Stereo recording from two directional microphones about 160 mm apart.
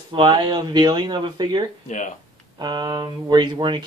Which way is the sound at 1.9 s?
50° left (ahead or behind).